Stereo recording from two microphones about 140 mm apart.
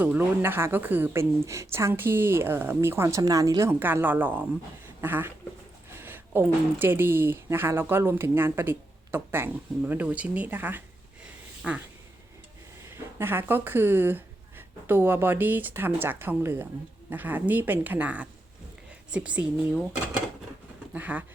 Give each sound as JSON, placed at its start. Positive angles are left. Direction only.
{"t": 0.0, "sound": "speech", "side_deg": -15}
{"t": 12.9, "sound": "speech", "side_deg": -15}